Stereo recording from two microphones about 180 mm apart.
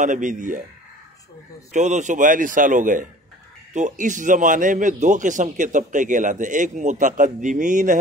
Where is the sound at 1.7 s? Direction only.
40° right (ahead or behind).